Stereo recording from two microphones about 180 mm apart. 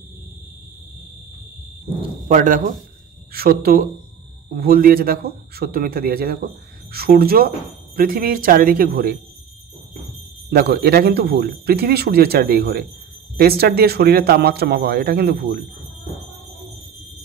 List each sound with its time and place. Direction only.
2.2 s speech: 45° right (ahead or behind)
10.5 s speech: 60° right (ahead or behind)